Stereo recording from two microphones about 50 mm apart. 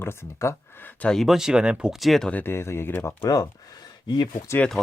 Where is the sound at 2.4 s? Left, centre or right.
Left.